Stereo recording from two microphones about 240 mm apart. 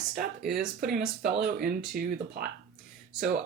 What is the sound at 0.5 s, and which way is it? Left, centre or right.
Speech, right.